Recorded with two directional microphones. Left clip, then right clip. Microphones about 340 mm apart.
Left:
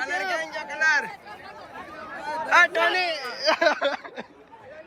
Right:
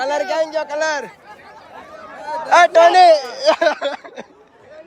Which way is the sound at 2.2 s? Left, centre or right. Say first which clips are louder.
Right 5 dB; right.